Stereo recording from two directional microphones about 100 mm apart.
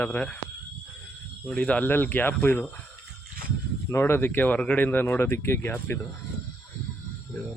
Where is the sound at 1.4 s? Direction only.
10° left (ahead or behind).